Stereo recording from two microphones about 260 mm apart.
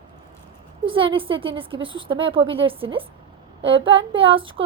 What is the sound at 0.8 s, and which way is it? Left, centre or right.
A woman's voice, centre.